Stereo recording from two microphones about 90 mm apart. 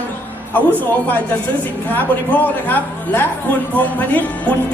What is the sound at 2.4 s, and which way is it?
A woman's voice, 20° left (ahead or behind).